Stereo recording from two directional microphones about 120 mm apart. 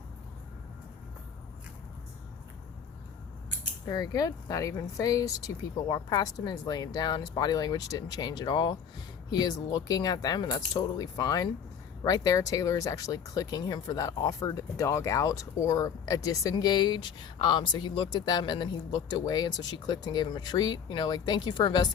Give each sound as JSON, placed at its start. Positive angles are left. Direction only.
{"t": 3.8, "sound": "speech", "side_deg": 30}